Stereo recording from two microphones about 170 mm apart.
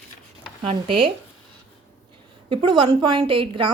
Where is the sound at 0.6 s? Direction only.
30° right (ahead or behind).